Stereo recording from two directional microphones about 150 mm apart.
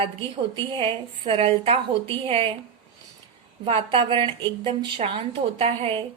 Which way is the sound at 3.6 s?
40° right (ahead or behind).